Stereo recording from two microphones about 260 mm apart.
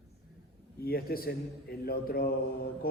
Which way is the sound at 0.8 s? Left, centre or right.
Left.